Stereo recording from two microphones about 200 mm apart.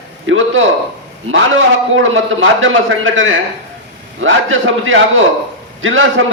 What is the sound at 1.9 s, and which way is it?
A man's voice, 75° right (ahead or behind).